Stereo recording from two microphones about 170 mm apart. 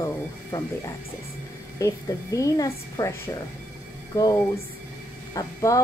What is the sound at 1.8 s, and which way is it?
Speech, 20° left (ahead or behind).